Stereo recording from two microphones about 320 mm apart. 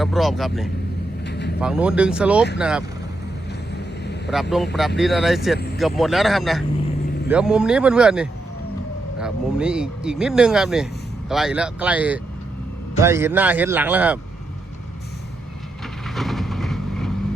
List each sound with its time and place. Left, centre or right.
0.0 s speech: centre
1.2 s vehicle: left
1.6 s speech: centre
4.3 s speech: centre
16.0 s vehicle: centre